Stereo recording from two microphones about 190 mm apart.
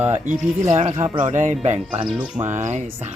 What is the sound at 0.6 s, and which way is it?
Speech, 35° right (ahead or behind).